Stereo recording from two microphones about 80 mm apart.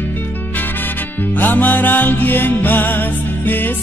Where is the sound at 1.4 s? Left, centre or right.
Left.